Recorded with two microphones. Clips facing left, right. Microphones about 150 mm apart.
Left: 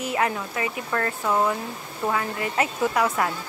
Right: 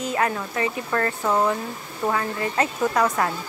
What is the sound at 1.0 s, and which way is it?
Speech, 5° left (ahead or behind).